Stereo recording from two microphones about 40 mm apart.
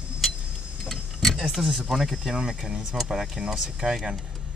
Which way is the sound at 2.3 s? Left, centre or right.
Centre.